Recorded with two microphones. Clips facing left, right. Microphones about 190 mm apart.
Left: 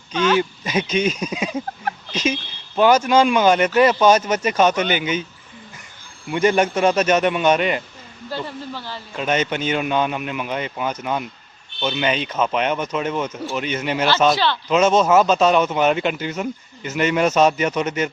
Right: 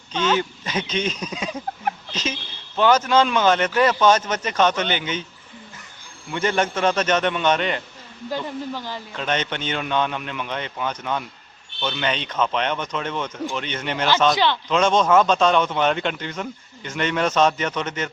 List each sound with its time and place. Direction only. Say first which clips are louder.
0.1 s speech: left 3 dB; 10° left (ahead or behind)
6.3 s speech: left 5 dB; 15° left (ahead or behind)
8.3 s speech: right 1 dB; 15° right (ahead or behind)
9.1 s speech: left 5 dB; 10° left (ahead or behind)
14.3 s speech: even; 15° right (ahead or behind)
14.7 s speech: left 4 dB; 5° left (ahead or behind)